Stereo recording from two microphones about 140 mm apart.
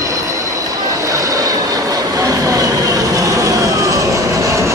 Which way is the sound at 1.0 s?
25° right (ahead or behind).